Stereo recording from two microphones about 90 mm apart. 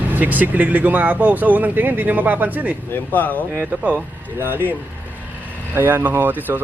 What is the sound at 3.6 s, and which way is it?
Speech, 15° right (ahead or behind).